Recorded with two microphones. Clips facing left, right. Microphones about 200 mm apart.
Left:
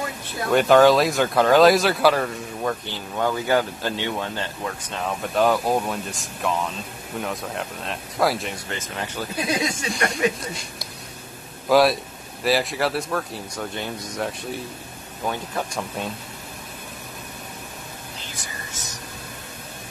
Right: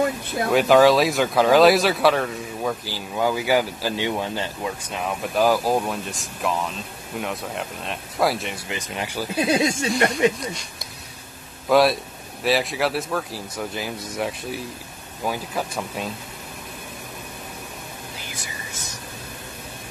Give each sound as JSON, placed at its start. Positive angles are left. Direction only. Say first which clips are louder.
{"t": 0.5, "sound": "speech", "louder": "even", "side_deg": 0}
{"t": 8.6, "sound": "speech", "louder": "right 1 dB", "side_deg": -15}
{"t": 9.4, "sound": "speech", "louder": "right 5 dB", "side_deg": -25}
{"t": 11.7, "sound": "speech", "louder": "even", "side_deg": 0}